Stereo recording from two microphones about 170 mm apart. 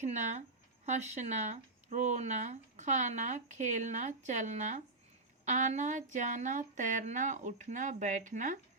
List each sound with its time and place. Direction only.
0.0 s speech: 40° right (ahead or behind)